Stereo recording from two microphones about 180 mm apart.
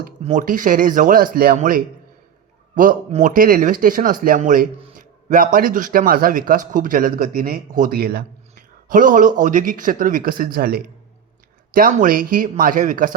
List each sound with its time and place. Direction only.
0.2 s speech: 45° right (ahead or behind)
3.1 s a man's voice: 45° right (ahead or behind)